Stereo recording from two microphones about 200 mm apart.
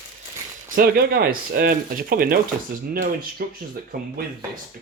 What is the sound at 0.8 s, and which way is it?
Speech, 50° right (ahead or behind).